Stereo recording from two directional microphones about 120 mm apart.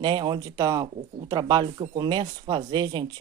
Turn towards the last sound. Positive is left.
turn(degrees=-40)  # may be behind; listen again after turning